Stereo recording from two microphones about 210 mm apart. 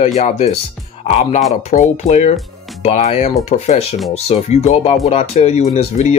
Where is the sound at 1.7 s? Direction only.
35° left (ahead or behind).